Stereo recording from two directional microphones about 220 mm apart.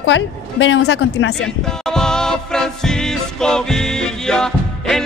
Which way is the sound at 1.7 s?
5° left (ahead or behind).